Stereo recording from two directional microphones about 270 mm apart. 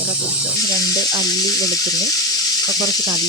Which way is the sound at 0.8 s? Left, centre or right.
Centre.